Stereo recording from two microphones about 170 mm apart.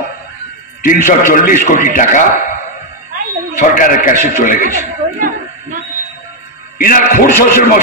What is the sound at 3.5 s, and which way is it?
A man's voice, 50° left (ahead or behind).